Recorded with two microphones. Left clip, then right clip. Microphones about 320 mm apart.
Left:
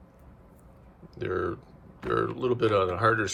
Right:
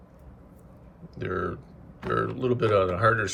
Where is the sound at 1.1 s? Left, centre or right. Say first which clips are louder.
Even; centre.